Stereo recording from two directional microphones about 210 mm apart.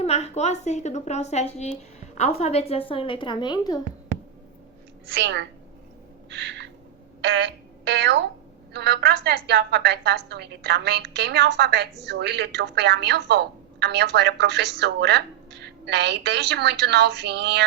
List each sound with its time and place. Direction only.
0.0 s a woman's voice: 30° left (ahead or behind)
5.1 s a woman's voice: 60° right (ahead or behind)
6.3 s owl: 60° right (ahead or behind)
7.2 s a woman's voice: 55° right (ahead or behind)